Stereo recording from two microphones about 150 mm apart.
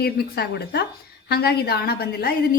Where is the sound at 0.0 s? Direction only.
90° left.